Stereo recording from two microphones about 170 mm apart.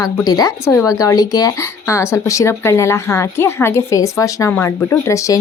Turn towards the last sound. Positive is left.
turn(degrees=20)  # may be behind; listen again after turning